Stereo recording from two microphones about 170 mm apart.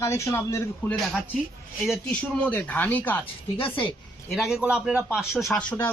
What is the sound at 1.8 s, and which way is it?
Speech, centre (ahead or behind).